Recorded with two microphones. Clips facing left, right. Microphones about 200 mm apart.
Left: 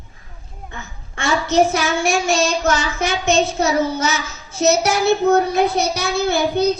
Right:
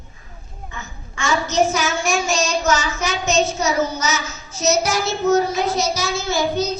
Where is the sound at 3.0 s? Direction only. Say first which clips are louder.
Left 2 dB; 55° left (ahead or behind).